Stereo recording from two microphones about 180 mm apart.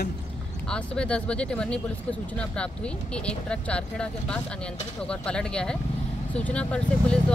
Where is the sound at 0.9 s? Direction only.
5° left (ahead or behind).